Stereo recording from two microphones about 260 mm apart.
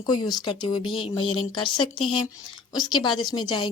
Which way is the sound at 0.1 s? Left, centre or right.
Centre.